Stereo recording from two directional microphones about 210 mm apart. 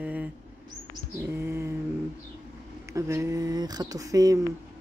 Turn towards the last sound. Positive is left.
turn(degrees=-15)  # may be behind; listen again after turning